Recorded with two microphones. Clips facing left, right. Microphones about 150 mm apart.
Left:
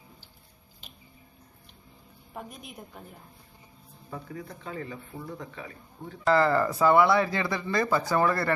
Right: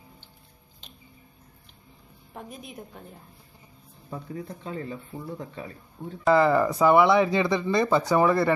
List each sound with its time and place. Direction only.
2.3 s a woman's voice: centre (ahead or behind)
4.3 s speech: 30° right (ahead or behind)
6.2 s speech: 15° right (ahead or behind)